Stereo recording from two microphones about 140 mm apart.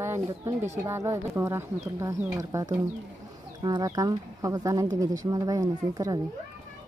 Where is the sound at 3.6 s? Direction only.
25° right (ahead or behind).